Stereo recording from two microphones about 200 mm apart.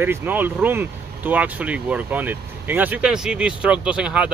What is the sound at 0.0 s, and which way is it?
Speech, 10° right (ahead or behind).